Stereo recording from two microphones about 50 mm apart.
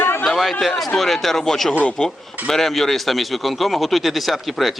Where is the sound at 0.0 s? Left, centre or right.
Left.